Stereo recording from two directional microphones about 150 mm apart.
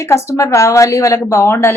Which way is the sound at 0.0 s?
20° left (ahead or behind).